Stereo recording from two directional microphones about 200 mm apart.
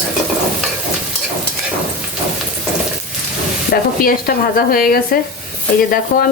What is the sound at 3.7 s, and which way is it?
Speech, 50° left (ahead or behind).